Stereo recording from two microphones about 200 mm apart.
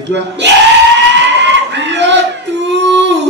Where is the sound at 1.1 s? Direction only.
60° right (ahead or behind).